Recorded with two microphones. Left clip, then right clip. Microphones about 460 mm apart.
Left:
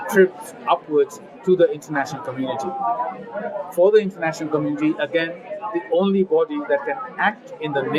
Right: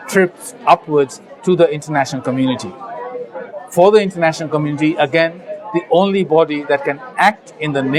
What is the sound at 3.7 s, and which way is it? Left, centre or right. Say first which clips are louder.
Speech: right 5 dB; right.